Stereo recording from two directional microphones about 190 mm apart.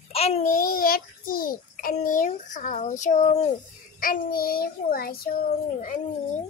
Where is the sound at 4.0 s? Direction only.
50° left (ahead or behind).